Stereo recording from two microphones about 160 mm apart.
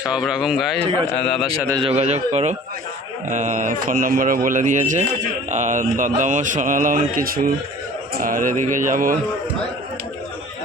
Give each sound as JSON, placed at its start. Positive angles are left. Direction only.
{"t": 0.0, "sound": "a man's voice", "side_deg": -5}
{"t": 1.8, "sound": "a man's voice", "side_deg": -40}